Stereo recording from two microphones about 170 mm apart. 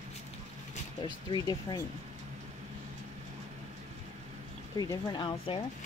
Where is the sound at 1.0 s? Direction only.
25° left (ahead or behind).